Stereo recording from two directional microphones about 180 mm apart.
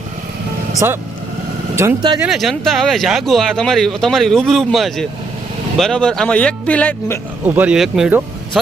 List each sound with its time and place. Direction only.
0.8 s speech: 15° right (ahead or behind)
2.2 s speech: centre (ahead or behind)
7.4 s speech: 10° right (ahead or behind)